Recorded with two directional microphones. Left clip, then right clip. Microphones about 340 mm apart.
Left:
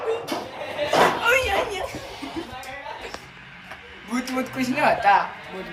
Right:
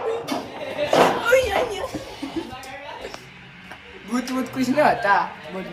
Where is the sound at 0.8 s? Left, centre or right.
Centre.